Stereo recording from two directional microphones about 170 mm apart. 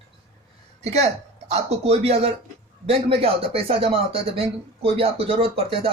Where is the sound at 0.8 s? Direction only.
40° right (ahead or behind).